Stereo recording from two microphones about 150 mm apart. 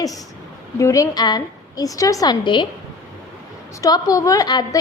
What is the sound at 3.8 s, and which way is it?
Speech, 25° left (ahead or behind).